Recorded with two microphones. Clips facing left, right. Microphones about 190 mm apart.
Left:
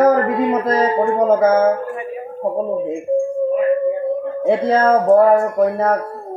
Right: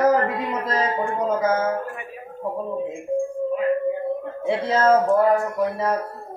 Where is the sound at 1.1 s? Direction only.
50° left (ahead or behind).